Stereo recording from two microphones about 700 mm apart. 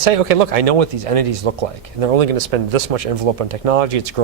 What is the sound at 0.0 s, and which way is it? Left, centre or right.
A man's voice, right.